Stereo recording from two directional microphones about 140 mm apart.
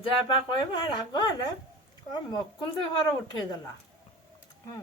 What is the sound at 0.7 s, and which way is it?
Speech, 35° left (ahead or behind).